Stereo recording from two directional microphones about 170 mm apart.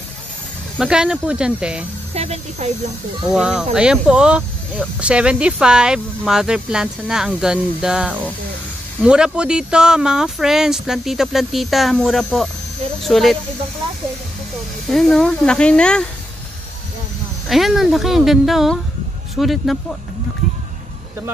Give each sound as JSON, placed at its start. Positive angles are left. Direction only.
{"t": 0.7, "sound": "speech", "side_deg": -5}
{"t": 2.1, "sound": "speech", "side_deg": -40}
{"t": 3.3, "sound": "speech", "side_deg": -5}
{"t": 14.9, "sound": "speech", "side_deg": 0}
{"t": 17.5, "sound": "speech", "side_deg": 0}